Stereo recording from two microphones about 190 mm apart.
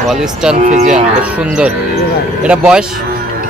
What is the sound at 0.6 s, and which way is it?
Speech, 40° right (ahead or behind).